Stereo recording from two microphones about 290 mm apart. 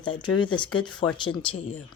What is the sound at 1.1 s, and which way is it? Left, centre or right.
Speech, centre.